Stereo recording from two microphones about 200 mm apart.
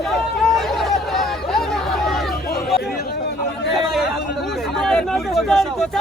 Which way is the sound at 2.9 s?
55° left (ahead or behind).